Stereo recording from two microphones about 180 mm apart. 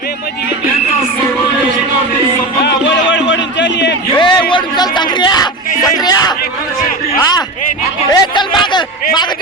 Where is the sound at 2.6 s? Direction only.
80° left.